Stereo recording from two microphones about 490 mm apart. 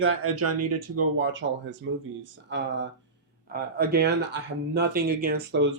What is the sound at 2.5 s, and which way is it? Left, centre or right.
Speech, right.